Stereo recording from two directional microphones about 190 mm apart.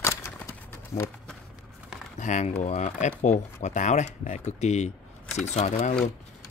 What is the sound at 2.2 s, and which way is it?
Speech, 40° left (ahead or behind).